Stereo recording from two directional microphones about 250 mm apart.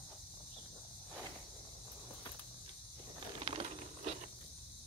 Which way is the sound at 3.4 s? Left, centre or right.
Right.